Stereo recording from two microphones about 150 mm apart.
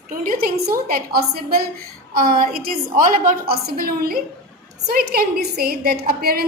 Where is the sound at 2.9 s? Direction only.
65° right (ahead or behind); by 6.4 s 90° right.